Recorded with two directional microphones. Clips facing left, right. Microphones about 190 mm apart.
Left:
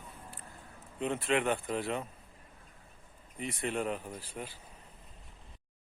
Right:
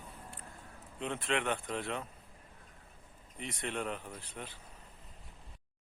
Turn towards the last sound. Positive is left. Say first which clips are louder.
# left 4 dB
turn(degrees=5)  # may be behind; listen again after turning